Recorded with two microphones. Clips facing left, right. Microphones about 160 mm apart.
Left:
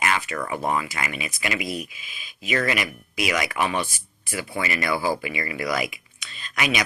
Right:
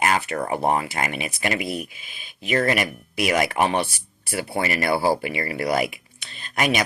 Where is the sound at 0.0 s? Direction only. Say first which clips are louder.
Right 3 dB; 40° right (ahead or behind).